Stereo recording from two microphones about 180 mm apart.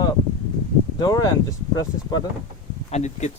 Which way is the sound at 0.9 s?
20° left (ahead or behind).